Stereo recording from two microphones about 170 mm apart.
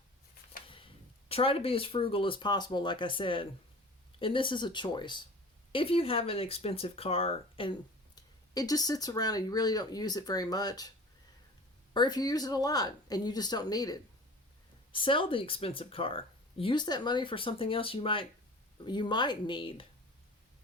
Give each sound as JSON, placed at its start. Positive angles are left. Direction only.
{"t": 0.7, "sound": "speech", "side_deg": 30}
{"t": 11.9, "sound": "speech", "side_deg": 25}